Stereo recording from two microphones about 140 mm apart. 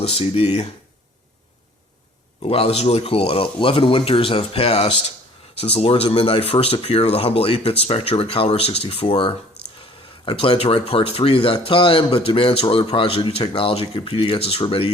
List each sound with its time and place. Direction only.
0.0 s speech: 45° left (ahead or behind)
2.4 s speech: 40° left (ahead or behind)